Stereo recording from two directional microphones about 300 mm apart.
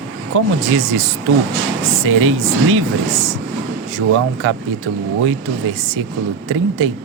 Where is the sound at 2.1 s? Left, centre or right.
Right.